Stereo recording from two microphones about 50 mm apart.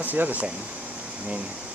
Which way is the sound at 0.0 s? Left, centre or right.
Right.